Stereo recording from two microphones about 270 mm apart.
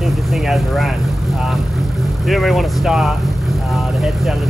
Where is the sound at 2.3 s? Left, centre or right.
Centre.